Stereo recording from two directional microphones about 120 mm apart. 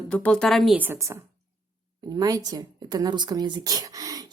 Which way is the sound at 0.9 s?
25° right (ahead or behind).